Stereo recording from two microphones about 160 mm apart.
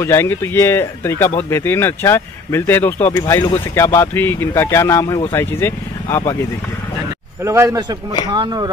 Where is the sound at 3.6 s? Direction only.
15° left (ahead or behind).